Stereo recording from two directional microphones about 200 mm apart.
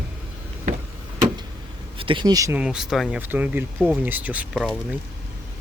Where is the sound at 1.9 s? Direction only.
25° right (ahead or behind).